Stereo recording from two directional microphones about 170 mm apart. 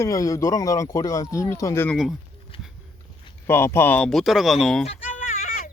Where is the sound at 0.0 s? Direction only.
20° left (ahead or behind).